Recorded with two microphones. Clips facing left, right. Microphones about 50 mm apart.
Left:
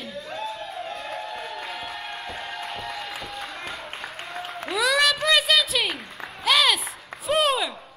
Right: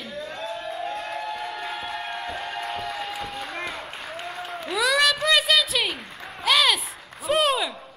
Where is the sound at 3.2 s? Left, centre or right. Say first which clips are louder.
Right 3 dB; right.